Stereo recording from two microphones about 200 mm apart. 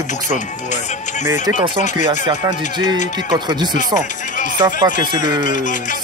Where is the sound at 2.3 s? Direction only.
20° right (ahead or behind).